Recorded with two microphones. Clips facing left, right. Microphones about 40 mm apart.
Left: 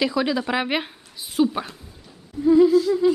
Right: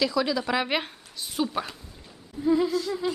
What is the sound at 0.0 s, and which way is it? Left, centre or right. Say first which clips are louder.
A woman's voice: left 3 dB; left.